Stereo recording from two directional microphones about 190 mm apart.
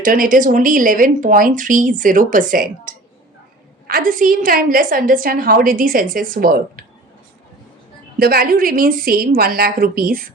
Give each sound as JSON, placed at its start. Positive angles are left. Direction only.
{"t": 0.0, "sound": "a woman's voice", "side_deg": -45}
{"t": 8.2, "sound": "a woman's voice", "side_deg": -55}